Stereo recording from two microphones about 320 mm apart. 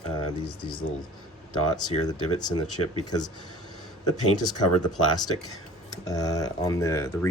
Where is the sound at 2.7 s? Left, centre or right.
Left.